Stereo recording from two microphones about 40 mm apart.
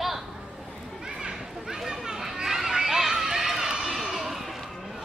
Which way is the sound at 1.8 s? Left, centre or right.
Centre.